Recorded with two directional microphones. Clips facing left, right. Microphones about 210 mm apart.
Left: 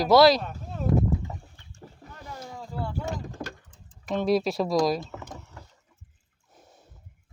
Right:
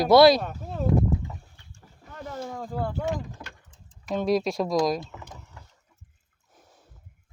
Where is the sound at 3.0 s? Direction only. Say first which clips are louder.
Right 3 dB; 45° left (ahead or behind).